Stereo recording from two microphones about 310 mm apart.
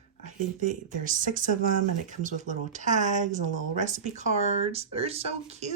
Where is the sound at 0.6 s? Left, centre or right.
Right.